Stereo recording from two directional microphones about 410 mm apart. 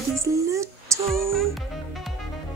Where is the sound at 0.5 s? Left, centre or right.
Centre.